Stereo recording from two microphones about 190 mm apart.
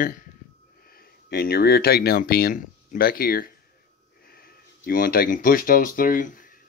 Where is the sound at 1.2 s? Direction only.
50° left (ahead or behind).